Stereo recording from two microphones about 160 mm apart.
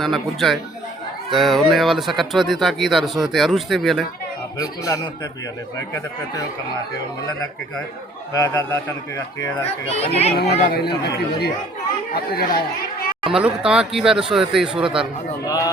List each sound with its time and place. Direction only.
0.0 s speech: centre (ahead or behind)
5.9 s a man's voice: 20° left (ahead or behind)
8.3 s a man's voice: 20° left (ahead or behind)
9.6 s speech: 40° left (ahead or behind)
10.3 s speech: 85° left
12.1 s speech: 75° left (ahead or behind)
13.3 s speech: 5° right (ahead or behind)
15.4 s a man's voice: 25° left (ahead or behind)